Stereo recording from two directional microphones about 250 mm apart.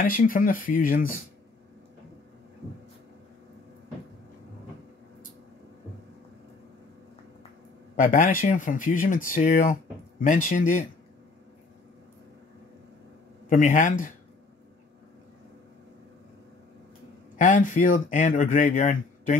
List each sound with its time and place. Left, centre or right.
0.0 s speech: left
7.9 s speech: left
13.5 s speech: left
17.4 s speech: left